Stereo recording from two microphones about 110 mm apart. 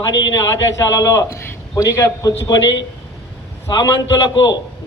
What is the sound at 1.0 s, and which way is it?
A man's voice, 30° left (ahead or behind).